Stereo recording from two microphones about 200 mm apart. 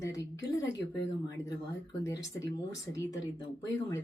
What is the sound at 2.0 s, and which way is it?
Speech, 15° left (ahead or behind).